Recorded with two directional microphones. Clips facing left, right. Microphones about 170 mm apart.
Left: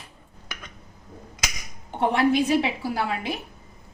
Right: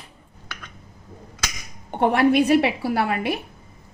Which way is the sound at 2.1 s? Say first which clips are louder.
Right 4 dB; 60° right (ahead or behind).